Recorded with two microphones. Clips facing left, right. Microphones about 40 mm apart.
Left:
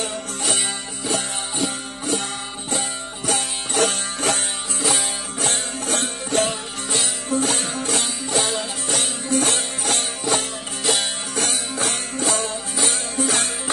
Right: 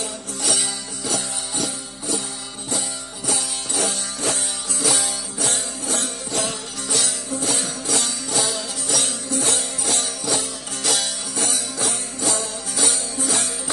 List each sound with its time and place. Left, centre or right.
0.0 s music: left
3.2 s music: left
4.8 s music: left
6.5 s music: left
7.3 s music: left
10.8 s music: left
11.3 s music: left